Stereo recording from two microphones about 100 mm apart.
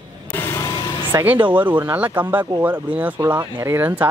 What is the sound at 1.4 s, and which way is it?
Speech, 55° right (ahead or behind).